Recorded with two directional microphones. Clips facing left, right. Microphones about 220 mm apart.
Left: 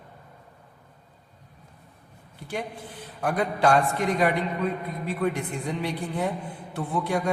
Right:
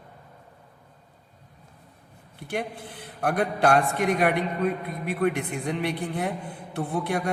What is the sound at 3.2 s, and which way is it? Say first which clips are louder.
A man's voice: even; 60° right (ahead or behind).